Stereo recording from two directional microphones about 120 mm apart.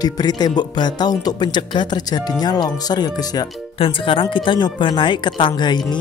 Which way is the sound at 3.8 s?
45° left (ahead or behind).